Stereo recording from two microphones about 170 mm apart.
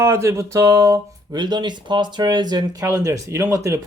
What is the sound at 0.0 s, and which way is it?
Speech, 15° right (ahead or behind).